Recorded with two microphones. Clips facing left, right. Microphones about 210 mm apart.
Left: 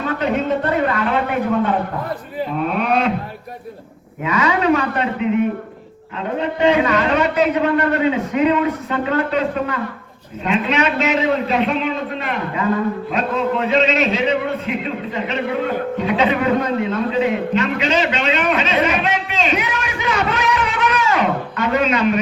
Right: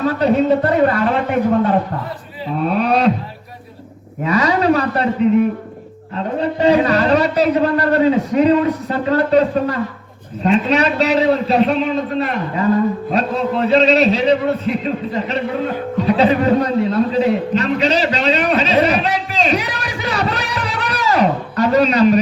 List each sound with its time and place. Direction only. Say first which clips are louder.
0.0 s a man's voice: right 5 dB; 35° right (ahead or behind)
2.6 s a man's voice: right 4 dB; 35° right (ahead or behind)
4.2 s a man's voice: right 3 dB; 35° right (ahead or behind)